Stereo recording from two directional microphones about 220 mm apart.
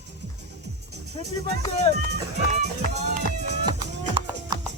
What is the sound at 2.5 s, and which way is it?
Speech, 30° right (ahead or behind).